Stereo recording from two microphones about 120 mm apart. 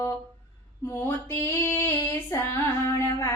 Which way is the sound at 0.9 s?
20° left (ahead or behind).